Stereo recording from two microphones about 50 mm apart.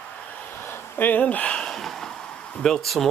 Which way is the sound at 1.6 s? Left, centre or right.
Centre.